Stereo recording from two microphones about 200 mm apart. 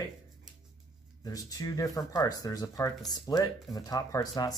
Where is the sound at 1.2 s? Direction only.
20° left (ahead or behind).